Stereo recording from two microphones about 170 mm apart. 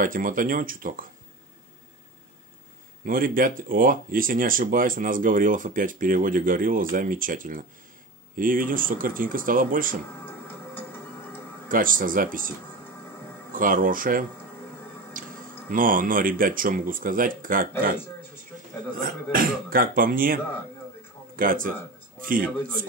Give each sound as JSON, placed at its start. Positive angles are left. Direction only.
{"t": 0.0, "sound": "speech", "side_deg": -55}
{"t": 3.1, "sound": "speech", "side_deg": -55}
{"t": 10.2, "sound": "music", "side_deg": 15}
{"t": 11.7, "sound": "speech", "side_deg": -55}
{"t": 15.2, "sound": "a sound", "side_deg": -55}
{"t": 15.7, "sound": "speech", "side_deg": -55}
{"t": 18.9, "sound": "speech", "side_deg": -55}
{"t": 21.4, "sound": "speech", "side_deg": -55}